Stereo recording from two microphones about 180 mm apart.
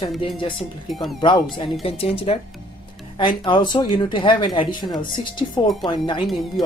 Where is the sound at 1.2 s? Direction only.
25° left (ahead or behind).